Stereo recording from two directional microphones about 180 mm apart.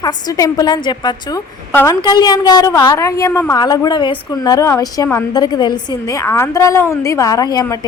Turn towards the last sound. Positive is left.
turn(degrees=20)  # may be behind; listen again after turning